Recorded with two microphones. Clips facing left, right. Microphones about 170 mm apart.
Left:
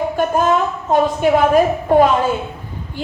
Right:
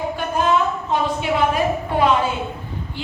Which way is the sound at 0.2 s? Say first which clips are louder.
Left 8 dB; 45° left (ahead or behind).